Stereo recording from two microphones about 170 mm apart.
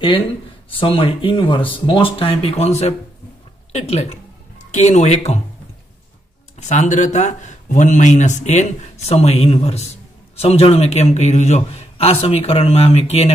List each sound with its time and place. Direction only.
0.7 s a man's voice: 30° left (ahead or behind)
6.6 s a man's voice: 45° left (ahead or behind)